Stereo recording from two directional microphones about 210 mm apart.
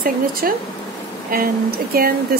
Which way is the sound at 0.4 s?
45° right (ahead or behind).